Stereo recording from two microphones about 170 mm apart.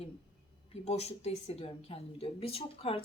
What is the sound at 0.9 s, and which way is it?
A woman's voice, 40° left (ahead or behind).